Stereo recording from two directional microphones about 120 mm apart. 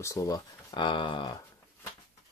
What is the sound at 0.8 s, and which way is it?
Speech, 40° left (ahead or behind).